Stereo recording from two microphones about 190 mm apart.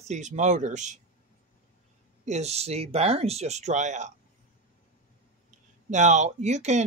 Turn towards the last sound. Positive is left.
turn(degrees=-35)  # may be behind; listen again after turning